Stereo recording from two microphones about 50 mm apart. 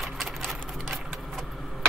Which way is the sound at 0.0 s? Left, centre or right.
Centre.